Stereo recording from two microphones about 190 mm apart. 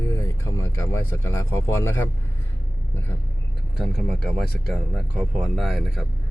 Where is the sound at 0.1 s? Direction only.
15° left (ahead or behind).